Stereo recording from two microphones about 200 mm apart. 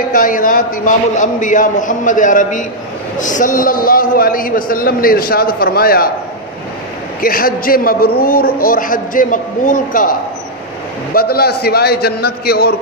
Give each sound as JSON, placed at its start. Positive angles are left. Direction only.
{"t": 0.1, "sound": "a man's voice", "side_deg": 45}
{"t": 7.2, "sound": "a man's voice", "side_deg": 45}
{"t": 11.1, "sound": "a man's voice", "side_deg": 50}